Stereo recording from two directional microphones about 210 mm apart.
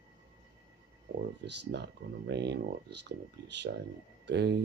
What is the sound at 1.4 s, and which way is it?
Speech, 50° right (ahead or behind).